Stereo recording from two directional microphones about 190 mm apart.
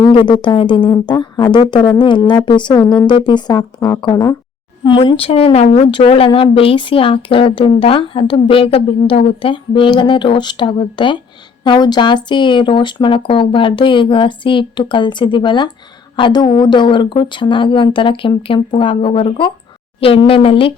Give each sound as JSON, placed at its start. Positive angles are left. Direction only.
{"t": 0.0, "sound": "a woman's voice", "side_deg": 25}